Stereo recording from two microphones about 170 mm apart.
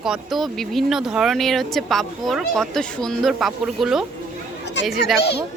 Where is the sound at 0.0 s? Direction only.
Centre (ahead or behind).